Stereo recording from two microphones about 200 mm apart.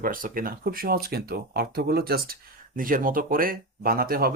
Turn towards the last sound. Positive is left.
turn(degrees=-45)  # may be behind; listen again after turning